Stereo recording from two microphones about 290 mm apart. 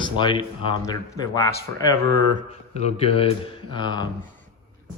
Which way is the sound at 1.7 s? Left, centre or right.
Right.